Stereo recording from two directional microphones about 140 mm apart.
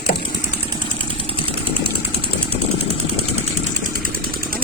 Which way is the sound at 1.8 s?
40° right (ahead or behind).